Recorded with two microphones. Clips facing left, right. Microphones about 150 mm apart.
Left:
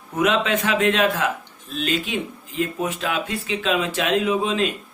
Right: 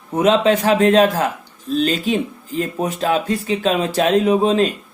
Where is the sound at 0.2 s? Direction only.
35° right (ahead or behind).